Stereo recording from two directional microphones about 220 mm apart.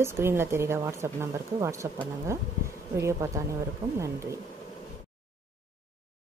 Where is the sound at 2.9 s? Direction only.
10° right (ahead or behind).